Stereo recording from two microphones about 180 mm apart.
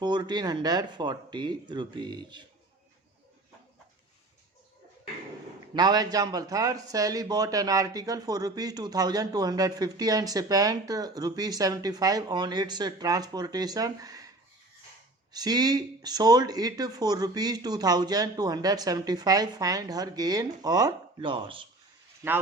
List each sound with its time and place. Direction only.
0.0 s speech: 25° right (ahead or behind)
5.7 s speech: 25° right (ahead or behind)